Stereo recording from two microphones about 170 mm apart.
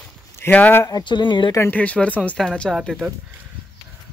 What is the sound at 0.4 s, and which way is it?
Speech, 10° left (ahead or behind).